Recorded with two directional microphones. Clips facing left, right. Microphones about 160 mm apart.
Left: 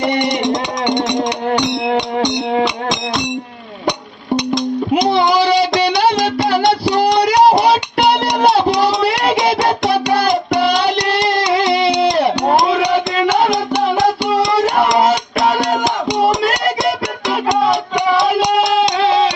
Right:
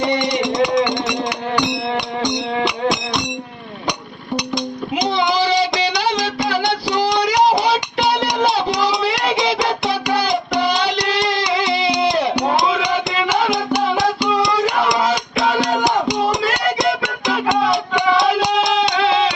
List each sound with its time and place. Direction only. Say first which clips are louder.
5.1 s child singing: left 2 dB; 40° left (ahead or behind)
5.8 s music: left 5 dB; 50° left (ahead or behind)
9.5 s child singing: left 4 dB; 50° left (ahead or behind)
11.6 s music: left 3 dB; 45° left (ahead or behind)
14.3 s music: left 3 dB; 45° left (ahead or behind)
18.7 s music: left 3 dB; 35° left (ahead or behind)